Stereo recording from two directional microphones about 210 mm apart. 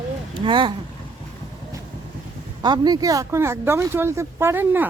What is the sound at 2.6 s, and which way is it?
Speech, 20° right (ahead or behind).